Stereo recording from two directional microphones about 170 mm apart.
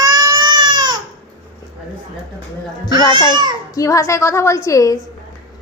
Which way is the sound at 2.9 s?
25° right (ahead or behind).